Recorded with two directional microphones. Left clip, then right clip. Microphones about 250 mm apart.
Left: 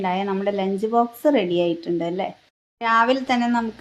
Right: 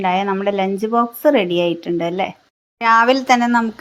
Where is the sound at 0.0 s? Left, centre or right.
Centre.